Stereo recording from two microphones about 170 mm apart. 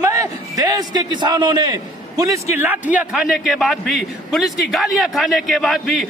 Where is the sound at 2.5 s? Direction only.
10° right (ahead or behind).